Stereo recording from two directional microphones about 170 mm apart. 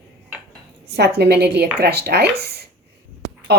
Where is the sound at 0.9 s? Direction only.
75° right (ahead or behind).